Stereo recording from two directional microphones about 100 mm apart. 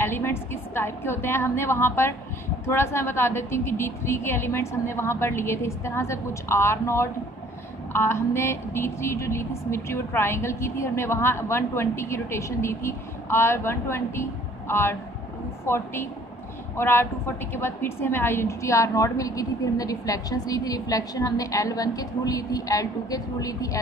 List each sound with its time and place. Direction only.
0.0 s a woman's voice: 25° left (ahead or behind)